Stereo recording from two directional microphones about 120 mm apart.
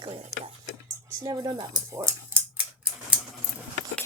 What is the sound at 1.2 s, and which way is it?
Speech, 35° right (ahead or behind).